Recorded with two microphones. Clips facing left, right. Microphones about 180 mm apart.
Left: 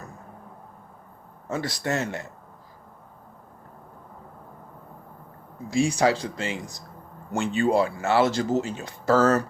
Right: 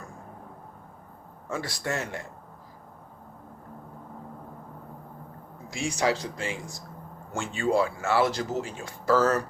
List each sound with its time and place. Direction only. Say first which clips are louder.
1.5 s speech: left 4 dB; 20° left (ahead or behind)
5.7 s speech: left 5 dB; 30° left (ahead or behind)